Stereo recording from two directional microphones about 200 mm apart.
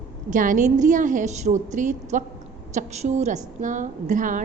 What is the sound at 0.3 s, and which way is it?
A woman's voice, 40° right (ahead or behind).